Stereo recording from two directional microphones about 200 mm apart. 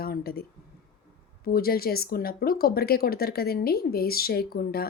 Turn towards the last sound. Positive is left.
turn(degrees=50)  # may be behind; listen again after turning